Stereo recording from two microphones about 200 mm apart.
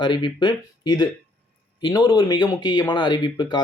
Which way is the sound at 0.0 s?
20° left (ahead or behind).